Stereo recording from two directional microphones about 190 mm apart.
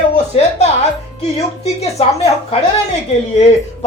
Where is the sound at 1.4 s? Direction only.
35° left (ahead or behind).